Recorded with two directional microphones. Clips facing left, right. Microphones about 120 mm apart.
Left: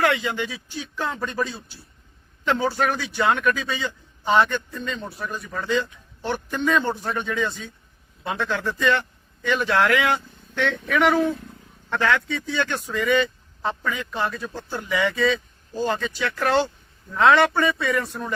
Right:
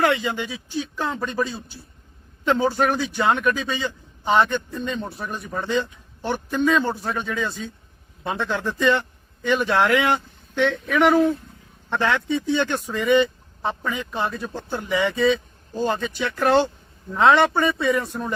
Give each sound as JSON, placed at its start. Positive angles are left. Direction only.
{"t": 0.0, "sound": "a man's voice", "side_deg": -15}